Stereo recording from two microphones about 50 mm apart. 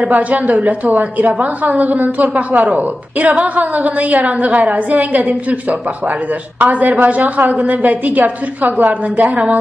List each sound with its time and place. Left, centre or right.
0.0 s a woman's voice: right